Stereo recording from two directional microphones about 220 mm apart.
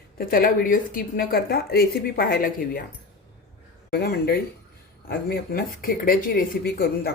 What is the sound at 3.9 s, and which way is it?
A woman's voice, 45° left (ahead or behind).